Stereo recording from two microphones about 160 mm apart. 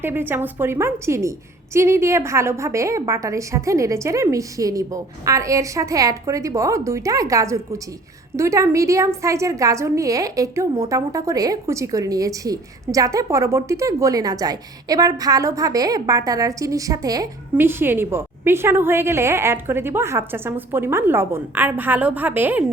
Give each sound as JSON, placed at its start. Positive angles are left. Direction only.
{"t": 0.0, "sound": "a woman's voice", "side_deg": -15}